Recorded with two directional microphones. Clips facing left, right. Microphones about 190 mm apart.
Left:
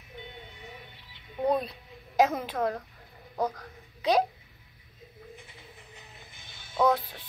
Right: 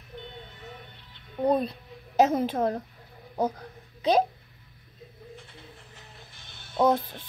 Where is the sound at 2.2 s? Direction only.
25° right (ahead or behind).